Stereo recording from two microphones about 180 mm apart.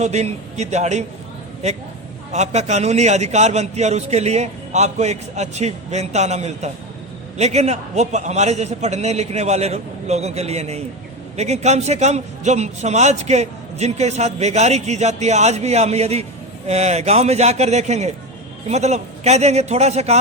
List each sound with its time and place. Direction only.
0.0 s a man's voice: 40° right (ahead or behind)
2.3 s a man's voice: 40° right (ahead or behind)